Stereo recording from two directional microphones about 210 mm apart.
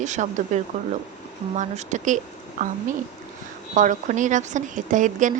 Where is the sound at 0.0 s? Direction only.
35° right (ahead or behind).